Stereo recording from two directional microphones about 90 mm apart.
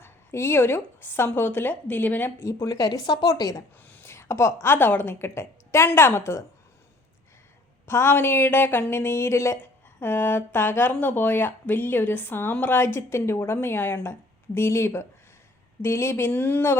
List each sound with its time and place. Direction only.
0.0 s speech: 30° left (ahead or behind)
2.4 s speech: 35° left (ahead or behind)
3.8 s a sound: 25° left (ahead or behind)
4.6 s speech: 25° left (ahead or behind)
7.9 s speech: 30° left (ahead or behind)